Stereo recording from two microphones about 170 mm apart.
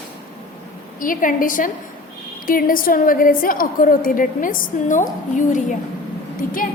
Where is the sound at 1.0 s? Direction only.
55° left (ahead or behind).